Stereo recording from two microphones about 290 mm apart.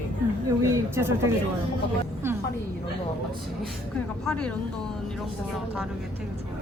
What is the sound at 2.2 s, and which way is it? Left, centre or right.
Music, centre.